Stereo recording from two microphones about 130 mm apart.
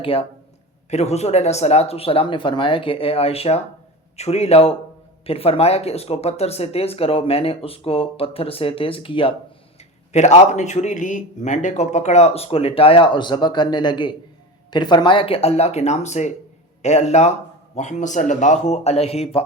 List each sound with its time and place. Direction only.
0.0 s speech: 45° left (ahead or behind)
0.9 s speech: 55° left (ahead or behind)
10.1 s a man's voice: 60° left (ahead or behind)